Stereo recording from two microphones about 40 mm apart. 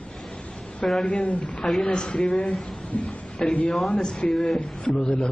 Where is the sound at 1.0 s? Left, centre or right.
Left.